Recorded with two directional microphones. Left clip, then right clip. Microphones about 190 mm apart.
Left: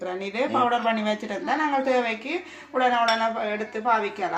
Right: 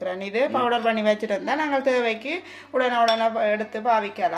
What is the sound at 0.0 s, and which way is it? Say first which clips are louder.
Speech: right 3 dB; 40° right (ahead or behind).